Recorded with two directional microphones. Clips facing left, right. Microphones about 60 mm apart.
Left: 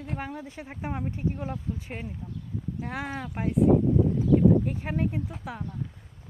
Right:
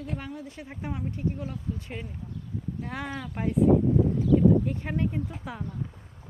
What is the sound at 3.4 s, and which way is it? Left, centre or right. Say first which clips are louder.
Speech: even; centre.